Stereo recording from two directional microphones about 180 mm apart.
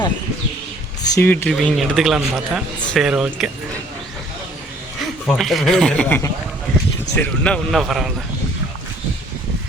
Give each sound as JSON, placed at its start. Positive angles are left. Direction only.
{"t": 1.0, "sound": "speech", "side_deg": 15}
{"t": 5.2, "sound": "speech", "side_deg": 0}